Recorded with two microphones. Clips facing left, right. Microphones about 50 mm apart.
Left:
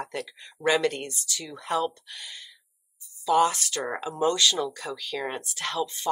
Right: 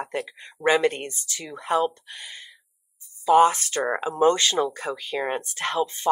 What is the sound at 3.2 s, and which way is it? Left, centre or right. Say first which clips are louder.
Speech: right 5 dB; right.